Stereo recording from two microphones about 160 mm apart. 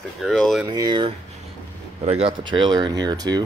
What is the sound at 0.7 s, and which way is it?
Speech, 25° right (ahead or behind).